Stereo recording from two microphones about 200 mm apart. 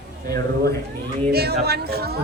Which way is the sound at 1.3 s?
50° right (ahead or behind).